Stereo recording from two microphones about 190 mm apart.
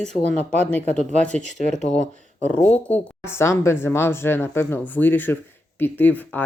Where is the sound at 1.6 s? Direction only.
35° left (ahead or behind).